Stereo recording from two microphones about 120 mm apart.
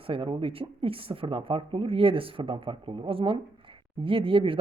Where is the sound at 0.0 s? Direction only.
50° right (ahead or behind).